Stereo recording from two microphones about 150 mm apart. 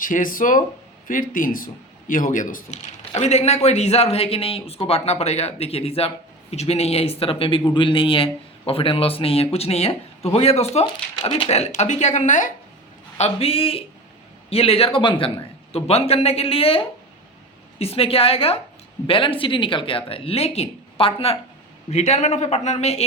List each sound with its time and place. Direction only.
0.0 s a man's voice: 65° left (ahead or behind)
3.2 s speech: 45° left (ahead or behind)
13.1 s speech: 45° left (ahead or behind)